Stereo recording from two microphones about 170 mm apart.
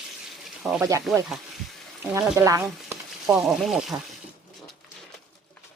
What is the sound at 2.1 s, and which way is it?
Speech, 20° right (ahead or behind).